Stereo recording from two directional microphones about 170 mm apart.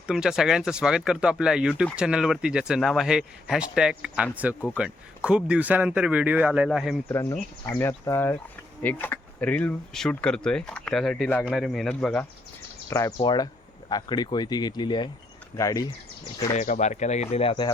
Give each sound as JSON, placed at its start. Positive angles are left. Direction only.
{"t": 0.1, "sound": "speech", "side_deg": -5}
{"t": 7.1, "sound": "speech", "side_deg": 15}
{"t": 12.9, "sound": "speech", "side_deg": 15}
{"t": 16.6, "sound": "speech", "side_deg": 45}